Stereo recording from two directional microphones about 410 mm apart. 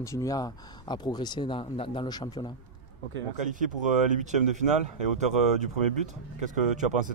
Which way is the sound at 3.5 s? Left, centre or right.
Centre.